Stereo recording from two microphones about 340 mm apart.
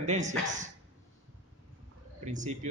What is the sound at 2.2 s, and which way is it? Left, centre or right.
Speech, right.